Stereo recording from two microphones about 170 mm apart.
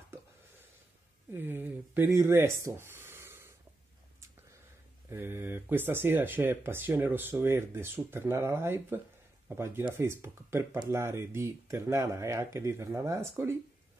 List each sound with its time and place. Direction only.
1.3 s speech: 10° right (ahead or behind)
5.1 s speech: 15° right (ahead or behind)